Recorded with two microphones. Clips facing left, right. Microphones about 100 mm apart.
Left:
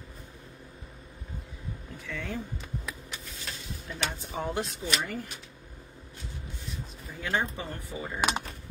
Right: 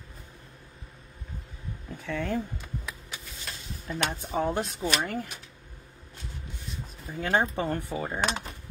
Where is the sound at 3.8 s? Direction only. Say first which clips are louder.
Right 5 dB; 45° right (ahead or behind).